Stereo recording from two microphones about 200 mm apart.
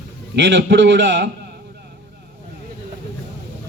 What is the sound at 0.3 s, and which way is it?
Speech, 65° right (ahead or behind).